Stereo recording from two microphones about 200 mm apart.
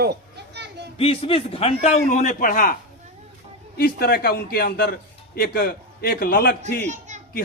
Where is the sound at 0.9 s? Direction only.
30° left (ahead or behind).